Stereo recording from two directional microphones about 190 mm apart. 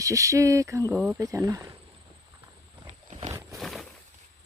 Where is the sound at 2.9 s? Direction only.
35° right (ahead or behind).